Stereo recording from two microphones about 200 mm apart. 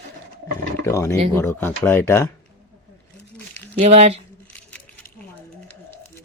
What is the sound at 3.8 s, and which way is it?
Speech, 30° right (ahead or behind).